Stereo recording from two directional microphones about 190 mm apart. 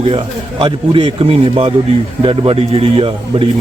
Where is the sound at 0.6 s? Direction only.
25° right (ahead or behind).